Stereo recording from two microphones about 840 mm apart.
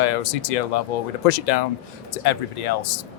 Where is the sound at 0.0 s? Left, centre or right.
Left.